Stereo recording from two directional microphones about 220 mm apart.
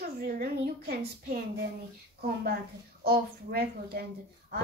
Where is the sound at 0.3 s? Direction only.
40° right (ahead or behind).